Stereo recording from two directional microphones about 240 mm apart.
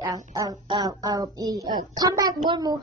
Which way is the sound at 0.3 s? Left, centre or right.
Centre.